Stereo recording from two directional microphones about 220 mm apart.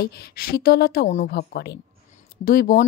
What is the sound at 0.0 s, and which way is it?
A woman's voice, 45° left (ahead or behind).